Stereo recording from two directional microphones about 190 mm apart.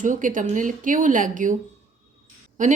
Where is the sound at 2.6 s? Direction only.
40° right (ahead or behind).